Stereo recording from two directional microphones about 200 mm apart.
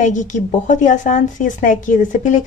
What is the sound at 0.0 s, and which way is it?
A woman's voice, 40° left (ahead or behind).